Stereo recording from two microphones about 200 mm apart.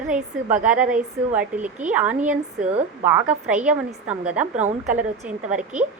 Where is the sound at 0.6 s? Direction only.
5° right (ahead or behind).